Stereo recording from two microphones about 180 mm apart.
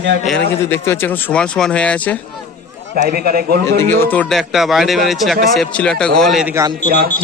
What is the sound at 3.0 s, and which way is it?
Speech, 60° right (ahead or behind).